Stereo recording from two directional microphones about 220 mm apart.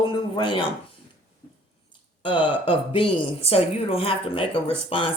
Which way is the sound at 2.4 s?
25° left (ahead or behind).